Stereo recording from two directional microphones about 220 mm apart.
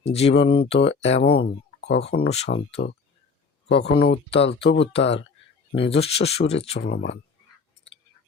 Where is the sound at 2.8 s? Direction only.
50° left (ahead or behind).